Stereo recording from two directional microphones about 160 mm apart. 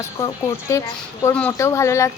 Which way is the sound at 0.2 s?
20° left (ahead or behind).